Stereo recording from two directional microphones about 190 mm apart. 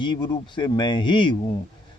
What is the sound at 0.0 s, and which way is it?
A man's voice, 25° left (ahead or behind).